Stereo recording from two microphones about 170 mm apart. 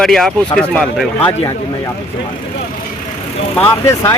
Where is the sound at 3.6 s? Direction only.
15° left (ahead or behind).